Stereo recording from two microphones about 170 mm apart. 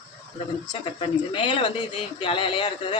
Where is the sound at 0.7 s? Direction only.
30° left (ahead or behind).